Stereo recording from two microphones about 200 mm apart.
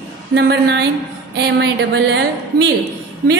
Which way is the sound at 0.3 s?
60° right (ahead or behind).